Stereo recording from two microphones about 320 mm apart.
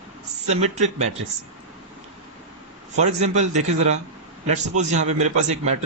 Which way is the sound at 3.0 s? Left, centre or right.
Right.